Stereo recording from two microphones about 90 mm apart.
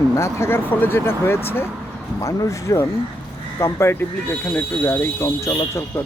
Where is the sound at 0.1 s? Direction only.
30° left (ahead or behind).